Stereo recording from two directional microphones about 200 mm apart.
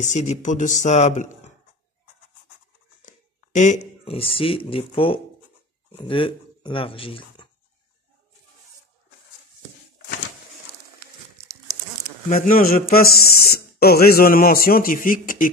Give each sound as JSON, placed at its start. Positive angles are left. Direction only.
{"t": 0.0, "sound": "speech", "side_deg": 35}
{"t": 3.0, "sound": "speech", "side_deg": 40}
{"t": 12.3, "sound": "a man's voice", "side_deg": 45}